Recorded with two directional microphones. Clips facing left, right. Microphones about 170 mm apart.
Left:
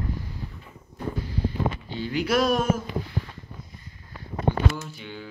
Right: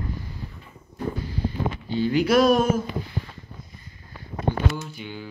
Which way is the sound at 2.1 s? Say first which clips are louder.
Right 4 dB; 40° right (ahead or behind).